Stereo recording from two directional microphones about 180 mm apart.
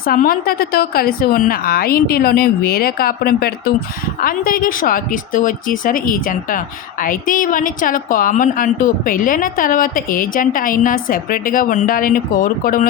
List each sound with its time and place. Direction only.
0.0 s a woman's voice: 55° left (ahead or behind)